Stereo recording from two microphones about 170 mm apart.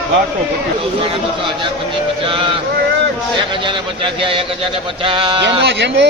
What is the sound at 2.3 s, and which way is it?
A man's voice, 30° right (ahead or behind).